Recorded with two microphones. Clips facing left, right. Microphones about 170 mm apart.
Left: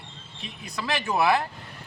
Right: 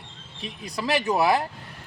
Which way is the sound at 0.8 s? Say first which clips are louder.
Right 2 dB; 40° right (ahead or behind).